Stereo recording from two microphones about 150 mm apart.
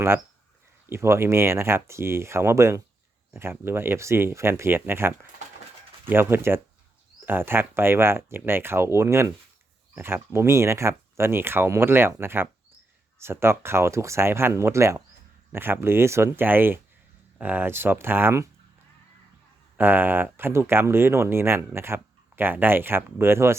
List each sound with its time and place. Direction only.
0.9 s speech: 15° right (ahead or behind)
19.7 s speech: 15° right (ahead or behind)